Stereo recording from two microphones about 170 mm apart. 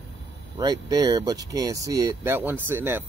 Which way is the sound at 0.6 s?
25° right (ahead or behind).